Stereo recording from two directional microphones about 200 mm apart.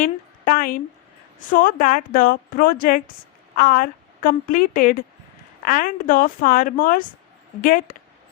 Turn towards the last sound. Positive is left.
turn(degrees=45)  # may be behind; listen again after turning